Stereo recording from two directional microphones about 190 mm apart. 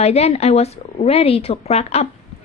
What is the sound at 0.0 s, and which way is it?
A woman's voice, 35° left (ahead or behind).